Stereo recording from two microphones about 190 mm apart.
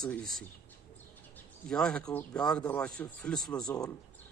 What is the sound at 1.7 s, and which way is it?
Speech, 5° left (ahead or behind).